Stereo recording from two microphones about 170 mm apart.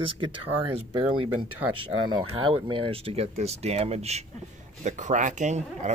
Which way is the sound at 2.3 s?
30° right (ahead or behind).